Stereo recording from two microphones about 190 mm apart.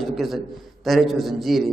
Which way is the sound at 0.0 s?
Centre (ahead or behind).